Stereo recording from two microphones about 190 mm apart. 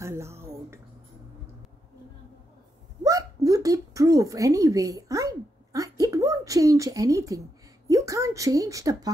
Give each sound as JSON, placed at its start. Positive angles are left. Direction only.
{"t": 0.0, "sound": "music", "side_deg": -15}
{"t": 3.0, "sound": "hiccup", "side_deg": -20}
{"t": 7.9, "sound": "speech", "side_deg": -15}